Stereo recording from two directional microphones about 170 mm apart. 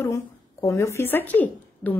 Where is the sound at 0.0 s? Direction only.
20° left (ahead or behind).